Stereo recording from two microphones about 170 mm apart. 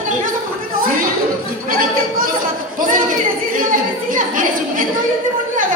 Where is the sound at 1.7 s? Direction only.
55° right (ahead or behind).